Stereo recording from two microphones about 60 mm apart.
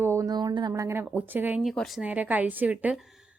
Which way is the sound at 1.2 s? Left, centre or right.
Right.